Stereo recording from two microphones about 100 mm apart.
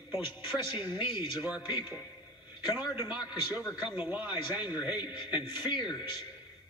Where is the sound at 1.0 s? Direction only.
55° left (ahead or behind).